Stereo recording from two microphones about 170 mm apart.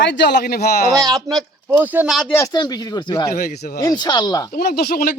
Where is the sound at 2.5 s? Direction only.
25° left (ahead or behind).